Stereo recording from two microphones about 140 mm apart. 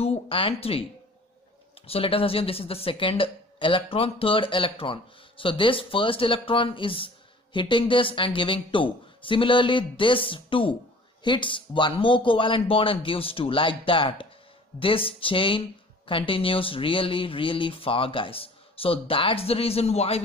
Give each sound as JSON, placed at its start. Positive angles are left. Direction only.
{"t": 0.0, "sound": "speech", "side_deg": 45}
{"t": 1.9, "sound": "a woman's voice", "side_deg": 40}